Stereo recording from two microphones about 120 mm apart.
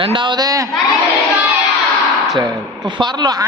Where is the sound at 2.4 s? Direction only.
35° right (ahead or behind).